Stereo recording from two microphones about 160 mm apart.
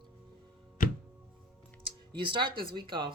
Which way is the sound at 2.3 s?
30° right (ahead or behind).